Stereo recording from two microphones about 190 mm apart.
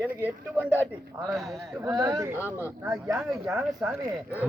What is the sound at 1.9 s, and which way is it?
Speech, 20° right (ahead or behind).